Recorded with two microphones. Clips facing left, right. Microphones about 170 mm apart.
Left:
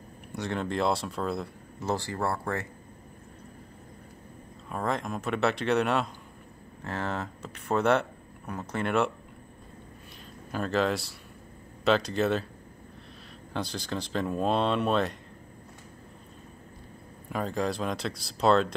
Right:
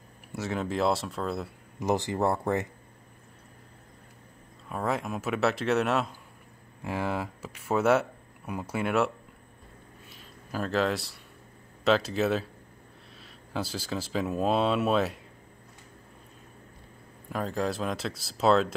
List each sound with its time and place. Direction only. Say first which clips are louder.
0.3 s speech: even; 5° right (ahead or behind)
1.8 s speech: right 4 dB; 15° right (ahead or behind)
4.6 s speech: even; 5° right (ahead or behind)
10.5 s speech: even; centre (ahead or behind)
13.5 s speech: even; 5° right (ahead or behind)
17.3 s speech: even; centre (ahead or behind)